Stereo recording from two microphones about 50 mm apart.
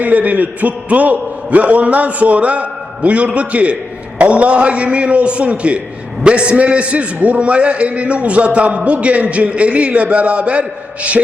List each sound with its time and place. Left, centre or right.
0.0 s a man's voice: right